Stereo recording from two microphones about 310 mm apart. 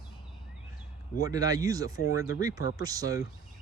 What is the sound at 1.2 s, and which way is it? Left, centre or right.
Speech, centre.